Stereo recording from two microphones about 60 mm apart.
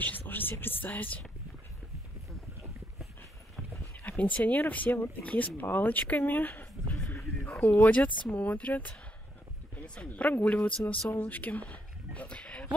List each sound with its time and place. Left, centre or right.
0.0 s speech: left
4.2 s speech: left